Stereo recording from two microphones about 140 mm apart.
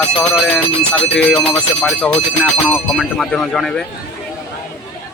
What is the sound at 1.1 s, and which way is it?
A man's voice, 10° left (ahead or behind).